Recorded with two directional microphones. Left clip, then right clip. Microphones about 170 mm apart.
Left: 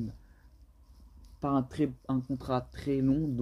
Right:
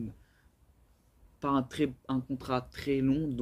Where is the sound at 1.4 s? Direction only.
25° left (ahead or behind).